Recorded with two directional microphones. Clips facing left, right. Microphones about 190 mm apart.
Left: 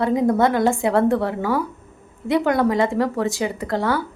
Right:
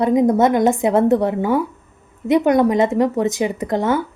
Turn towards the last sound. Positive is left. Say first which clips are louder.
# right 3 dB
turn(degrees=-20)  # may be behind; listen again after turning